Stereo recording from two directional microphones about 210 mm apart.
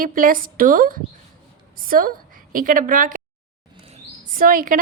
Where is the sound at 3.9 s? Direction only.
40° right (ahead or behind).